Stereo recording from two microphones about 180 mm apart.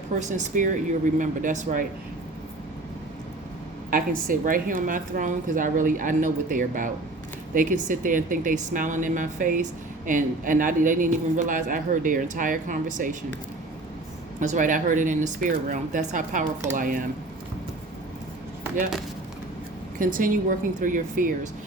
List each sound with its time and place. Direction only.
0.2 s a man's voice: 40° right (ahead or behind)
3.8 s a man's voice: 50° right (ahead or behind)
14.3 s a man's voice: 45° right (ahead or behind)
20.0 s a man's voice: 50° right (ahead or behind)